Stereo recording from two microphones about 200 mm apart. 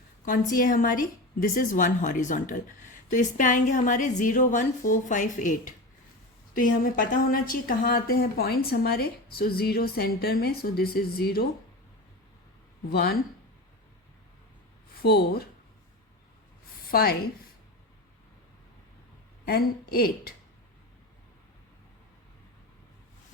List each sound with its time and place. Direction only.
0.3 s a woman's voice: 40° left (ahead or behind)
12.9 s speech: 50° left (ahead or behind)
15.0 s speech: 50° left (ahead or behind)
16.8 s a woman's voice: 50° left (ahead or behind)
19.5 s speech: 50° left (ahead or behind)